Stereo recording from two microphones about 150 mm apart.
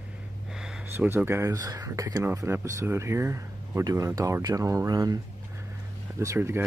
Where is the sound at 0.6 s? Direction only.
5° right (ahead or behind).